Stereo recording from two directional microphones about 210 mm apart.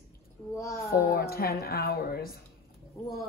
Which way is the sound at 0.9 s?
45° left (ahead or behind).